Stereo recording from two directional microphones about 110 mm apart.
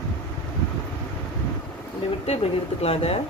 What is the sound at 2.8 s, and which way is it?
Speech, 65° left (ahead or behind).